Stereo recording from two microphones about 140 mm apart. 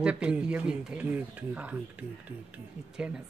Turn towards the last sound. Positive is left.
turn(degrees=-10)  # may be behind; listen again after turning